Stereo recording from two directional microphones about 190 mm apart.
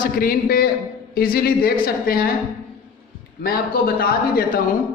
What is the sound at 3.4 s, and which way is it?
Speech, 50° left (ahead or behind).